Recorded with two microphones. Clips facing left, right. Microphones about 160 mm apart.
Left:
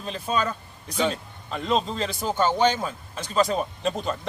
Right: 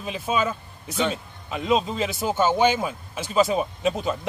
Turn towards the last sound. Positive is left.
turn(degrees=-5)  # may be behind; listen again after turning